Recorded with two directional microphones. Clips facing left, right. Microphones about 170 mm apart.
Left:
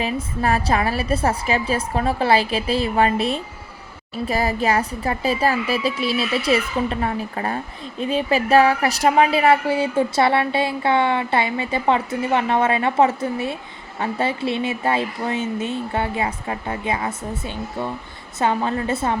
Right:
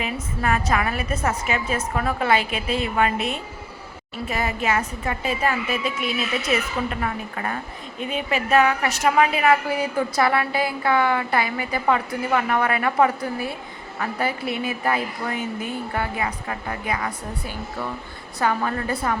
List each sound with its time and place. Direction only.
0.0 s a woman's voice: 35° left (ahead or behind)